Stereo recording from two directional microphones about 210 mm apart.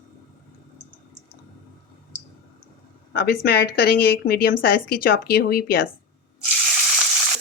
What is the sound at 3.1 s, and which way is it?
Speech, 50° left (ahead or behind).